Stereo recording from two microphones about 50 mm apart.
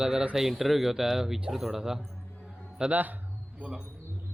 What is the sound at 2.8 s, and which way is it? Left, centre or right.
Speech, right.